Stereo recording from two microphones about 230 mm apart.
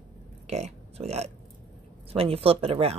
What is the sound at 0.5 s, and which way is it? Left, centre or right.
Speech, right.